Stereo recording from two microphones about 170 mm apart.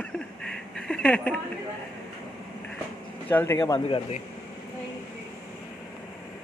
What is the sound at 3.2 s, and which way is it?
Speech, 10° left (ahead or behind).